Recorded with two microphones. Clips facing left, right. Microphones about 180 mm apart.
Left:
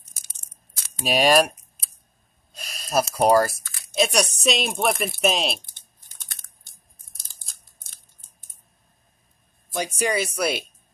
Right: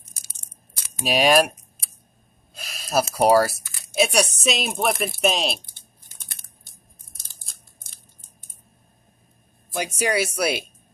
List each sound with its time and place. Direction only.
1.0 s speech: centre (ahead or behind)
2.5 s speech: 5° right (ahead or behind)
9.9 s speech: 10° right (ahead or behind)